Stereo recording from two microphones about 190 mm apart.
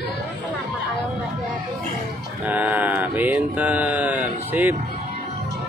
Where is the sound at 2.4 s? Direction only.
10° right (ahead or behind).